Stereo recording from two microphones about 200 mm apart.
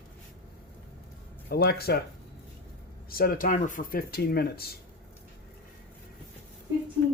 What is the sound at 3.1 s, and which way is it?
Speech, 50° left (ahead or behind).